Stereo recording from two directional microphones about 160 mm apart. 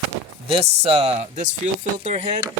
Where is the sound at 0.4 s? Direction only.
40° right (ahead or behind).